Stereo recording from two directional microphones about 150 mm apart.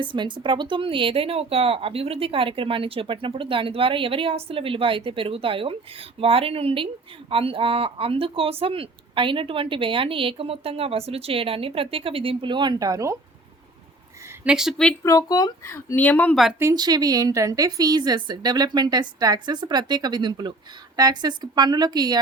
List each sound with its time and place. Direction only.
0.0 s a woman's voice: 35° right (ahead or behind)
14.4 s speech: 5° right (ahead or behind)
15.0 s speech: 25° left (ahead or behind)
16.6 s a woman's voice: 20° right (ahead or behind)